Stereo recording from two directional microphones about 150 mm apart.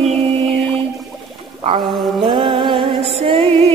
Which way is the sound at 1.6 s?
35° right (ahead or behind).